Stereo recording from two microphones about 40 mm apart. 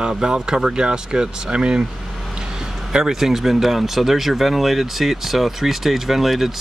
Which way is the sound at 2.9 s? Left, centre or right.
Centre.